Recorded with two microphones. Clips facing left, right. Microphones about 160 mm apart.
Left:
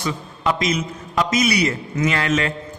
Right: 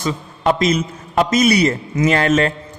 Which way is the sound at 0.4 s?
45° right (ahead or behind).